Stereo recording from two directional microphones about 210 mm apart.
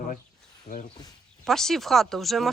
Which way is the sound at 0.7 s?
35° left (ahead or behind).